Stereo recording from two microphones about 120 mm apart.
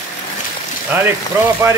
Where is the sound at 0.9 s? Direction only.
15° right (ahead or behind).